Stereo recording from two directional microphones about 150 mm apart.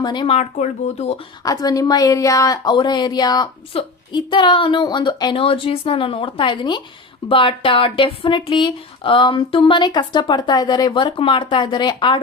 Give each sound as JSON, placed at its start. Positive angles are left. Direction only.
{"t": 0.0, "sound": "speech", "side_deg": 30}
{"t": 0.3, "sound": "speech", "side_deg": 45}
{"t": 1.5, "sound": "a woman's voice", "side_deg": 25}